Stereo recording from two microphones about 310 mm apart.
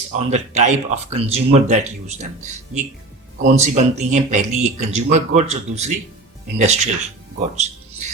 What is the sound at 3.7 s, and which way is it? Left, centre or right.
Speech, right.